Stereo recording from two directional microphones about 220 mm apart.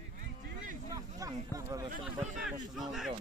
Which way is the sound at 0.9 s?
15° right (ahead or behind).